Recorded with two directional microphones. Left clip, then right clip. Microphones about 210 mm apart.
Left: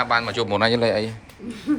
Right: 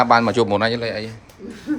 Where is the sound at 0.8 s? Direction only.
Centre (ahead or behind).